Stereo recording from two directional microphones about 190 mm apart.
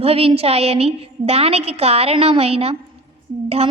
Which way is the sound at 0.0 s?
30° right (ahead or behind).